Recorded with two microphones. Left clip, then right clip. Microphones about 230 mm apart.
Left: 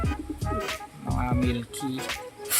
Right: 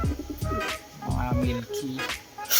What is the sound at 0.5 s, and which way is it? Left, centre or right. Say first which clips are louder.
Music: right 2 dB; centre.